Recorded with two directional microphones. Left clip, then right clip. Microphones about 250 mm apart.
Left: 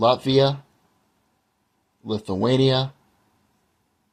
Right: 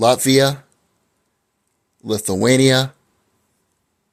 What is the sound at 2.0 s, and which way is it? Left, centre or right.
Speech, right.